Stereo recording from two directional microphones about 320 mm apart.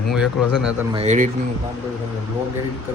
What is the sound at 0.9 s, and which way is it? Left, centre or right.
Speech, right.